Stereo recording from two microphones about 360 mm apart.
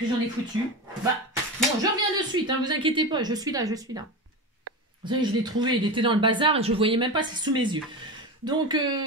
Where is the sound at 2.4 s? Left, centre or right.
Centre.